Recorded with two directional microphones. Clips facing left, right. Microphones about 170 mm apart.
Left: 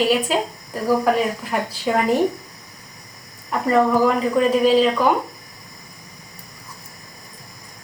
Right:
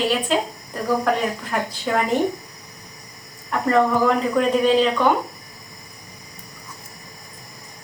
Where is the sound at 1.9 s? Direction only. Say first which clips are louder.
Left 2 dB; 10° left (ahead or behind).